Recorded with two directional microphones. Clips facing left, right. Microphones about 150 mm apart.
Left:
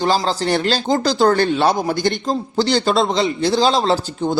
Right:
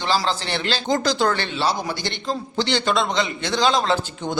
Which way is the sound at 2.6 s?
40° left (ahead or behind).